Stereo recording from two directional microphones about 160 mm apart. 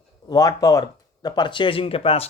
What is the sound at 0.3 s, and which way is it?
Speech, 20° left (ahead or behind).